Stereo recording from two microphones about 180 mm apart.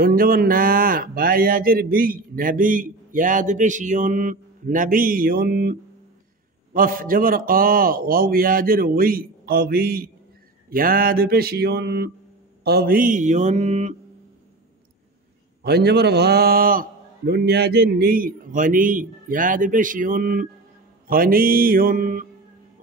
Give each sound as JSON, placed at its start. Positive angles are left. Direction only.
{"t": 0.0, "sound": "speech", "side_deg": -55}
{"t": 15.6, "sound": "speech", "side_deg": -65}